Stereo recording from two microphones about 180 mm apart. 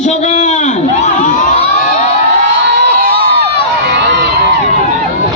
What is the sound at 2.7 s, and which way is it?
Crowd, 55° right (ahead or behind).